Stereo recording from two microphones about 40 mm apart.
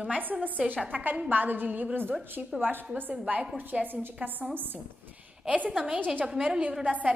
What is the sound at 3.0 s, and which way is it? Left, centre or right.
A woman's voice, right.